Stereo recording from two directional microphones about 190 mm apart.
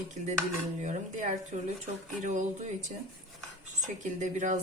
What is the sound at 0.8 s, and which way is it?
A woman's voice, 40° right (ahead or behind).